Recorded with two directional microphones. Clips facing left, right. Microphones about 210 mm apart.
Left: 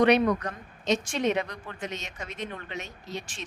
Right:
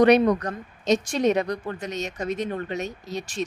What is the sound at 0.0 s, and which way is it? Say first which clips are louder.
A woman's voice: right 4 dB; 40° right (ahead or behind).